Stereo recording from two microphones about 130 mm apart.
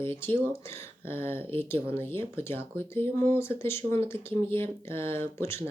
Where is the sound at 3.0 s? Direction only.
45° right (ahead or behind).